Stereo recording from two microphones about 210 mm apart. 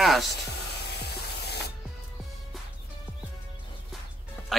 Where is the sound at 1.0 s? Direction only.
50° left (ahead or behind).